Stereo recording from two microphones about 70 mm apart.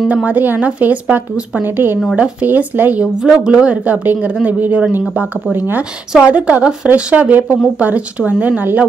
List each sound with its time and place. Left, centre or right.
0.1 s speech: right